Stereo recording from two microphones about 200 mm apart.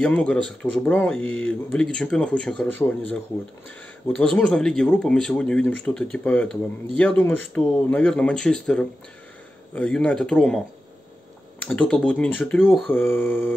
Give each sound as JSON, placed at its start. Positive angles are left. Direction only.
{"t": 0.0, "sound": "speech", "side_deg": 5}
{"t": 1.2, "sound": "speech", "side_deg": 80}
{"t": 1.5, "sound": "speech", "side_deg": 5}
{"t": 11.6, "sound": "speech", "side_deg": 5}